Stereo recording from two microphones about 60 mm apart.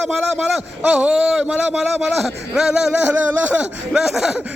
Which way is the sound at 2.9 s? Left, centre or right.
Centre.